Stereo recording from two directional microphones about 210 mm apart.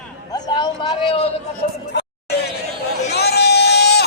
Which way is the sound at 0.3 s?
20° left (ahead or behind).